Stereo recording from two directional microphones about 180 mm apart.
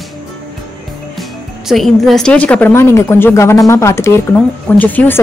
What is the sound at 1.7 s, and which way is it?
Speech, centre (ahead or behind).